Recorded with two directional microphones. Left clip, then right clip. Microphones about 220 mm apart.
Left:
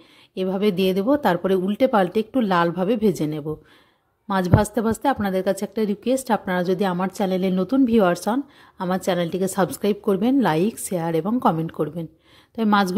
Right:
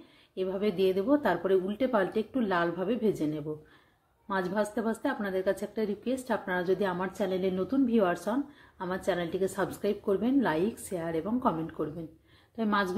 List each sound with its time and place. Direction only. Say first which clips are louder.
0.3 s a woman's voice: left 8 dB; 50° left (ahead or behind)